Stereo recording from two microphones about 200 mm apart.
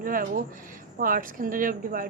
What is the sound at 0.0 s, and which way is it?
A woman's voice, 45° right (ahead or behind).